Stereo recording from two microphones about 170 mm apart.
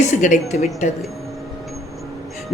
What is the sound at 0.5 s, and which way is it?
Speech, 45° left (ahead or behind).